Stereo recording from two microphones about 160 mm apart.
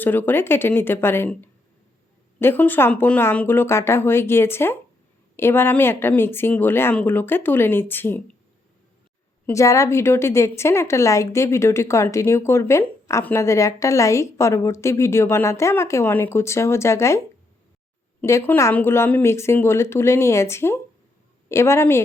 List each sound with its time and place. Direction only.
0.0 s a woman's voice: 10° left (ahead or behind)
9.5 s a woman's voice: 20° left (ahead or behind)
18.2 s a woman's voice: 15° left (ahead or behind)